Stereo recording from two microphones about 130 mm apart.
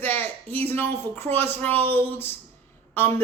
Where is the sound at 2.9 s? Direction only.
15° left (ahead or behind).